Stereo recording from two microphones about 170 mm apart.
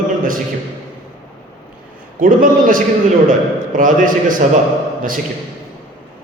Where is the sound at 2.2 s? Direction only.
55° right (ahead or behind).